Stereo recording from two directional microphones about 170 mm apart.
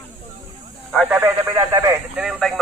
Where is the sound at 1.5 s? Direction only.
20° right (ahead or behind).